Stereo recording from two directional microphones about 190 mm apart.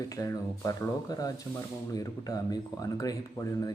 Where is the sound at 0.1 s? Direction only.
15° left (ahead or behind).